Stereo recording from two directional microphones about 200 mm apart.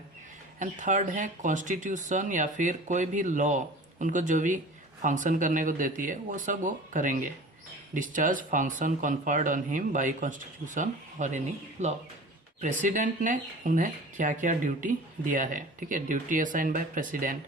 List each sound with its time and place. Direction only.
0.6 s speech: 40° right (ahead or behind)